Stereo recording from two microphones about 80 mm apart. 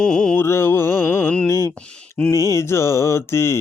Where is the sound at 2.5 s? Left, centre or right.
Left.